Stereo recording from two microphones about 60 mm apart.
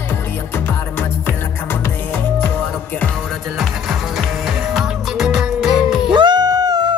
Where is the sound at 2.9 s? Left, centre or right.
Left.